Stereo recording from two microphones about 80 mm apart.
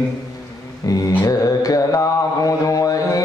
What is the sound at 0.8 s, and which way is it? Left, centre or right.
Mantra, left.